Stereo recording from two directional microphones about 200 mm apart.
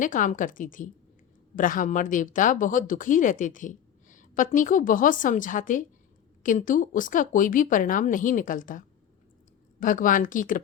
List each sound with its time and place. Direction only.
0.0 s speech: 40° left (ahead or behind)
9.8 s speech: 40° left (ahead or behind)